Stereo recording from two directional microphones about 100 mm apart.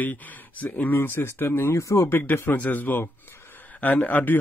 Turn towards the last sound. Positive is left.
turn(degrees=15)  # may be behind; listen again after turning